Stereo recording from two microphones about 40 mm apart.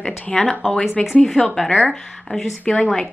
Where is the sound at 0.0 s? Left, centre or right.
Left.